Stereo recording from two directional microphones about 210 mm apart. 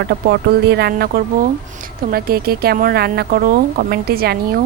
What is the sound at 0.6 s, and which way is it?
A woman's voice, 50° right (ahead or behind).